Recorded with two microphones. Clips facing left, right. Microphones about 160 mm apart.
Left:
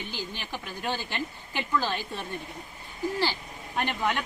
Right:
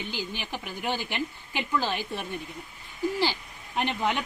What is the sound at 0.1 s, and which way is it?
Speech, 15° right (ahead or behind).